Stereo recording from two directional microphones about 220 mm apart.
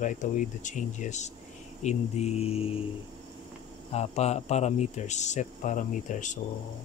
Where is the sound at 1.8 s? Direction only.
30° left (ahead or behind).